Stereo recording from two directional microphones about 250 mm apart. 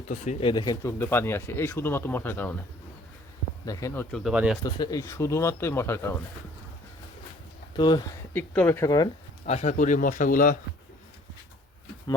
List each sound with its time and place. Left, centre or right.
0.1 s speech: left; by 2.6 s centre
3.7 s speech: centre
4.6 s speech: centre
7.8 s speech: centre
9.5 s speech: left